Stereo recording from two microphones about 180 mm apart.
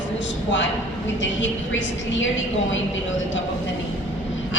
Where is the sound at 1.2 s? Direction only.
90° left.